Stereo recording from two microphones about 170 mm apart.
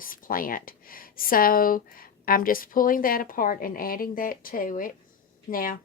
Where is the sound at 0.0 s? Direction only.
55° left (ahead or behind).